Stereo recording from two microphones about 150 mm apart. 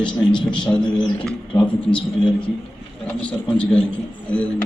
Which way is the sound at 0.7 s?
10° left (ahead or behind).